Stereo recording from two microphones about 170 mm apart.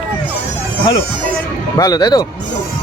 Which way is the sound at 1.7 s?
20° left (ahead or behind).